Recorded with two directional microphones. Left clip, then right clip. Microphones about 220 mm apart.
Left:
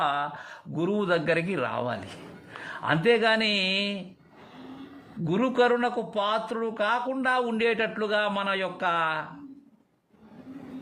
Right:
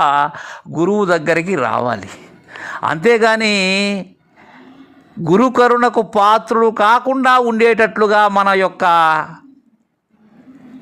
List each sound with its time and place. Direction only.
0.0 s a man's voice: 30° right (ahead or behind)
5.2 s a man's voice: 35° right (ahead or behind)